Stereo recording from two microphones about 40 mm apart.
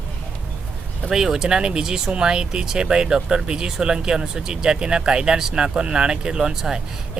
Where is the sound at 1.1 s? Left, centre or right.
Centre.